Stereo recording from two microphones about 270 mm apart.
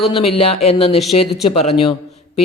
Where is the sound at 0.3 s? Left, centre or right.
Left.